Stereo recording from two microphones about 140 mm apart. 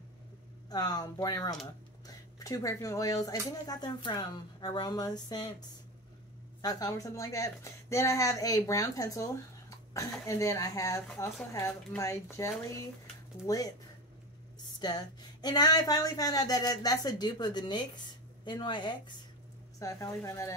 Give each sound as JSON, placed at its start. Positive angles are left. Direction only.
{"t": 0.7, "sound": "speech", "side_deg": 30}
{"t": 6.6, "sound": "speech", "side_deg": 25}
{"t": 14.8, "sound": "speech", "side_deg": 30}